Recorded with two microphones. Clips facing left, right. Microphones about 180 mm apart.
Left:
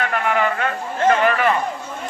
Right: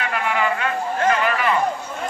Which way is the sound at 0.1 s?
45° left (ahead or behind).